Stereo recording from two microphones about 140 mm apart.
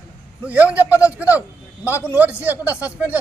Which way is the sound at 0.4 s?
10° right (ahead or behind).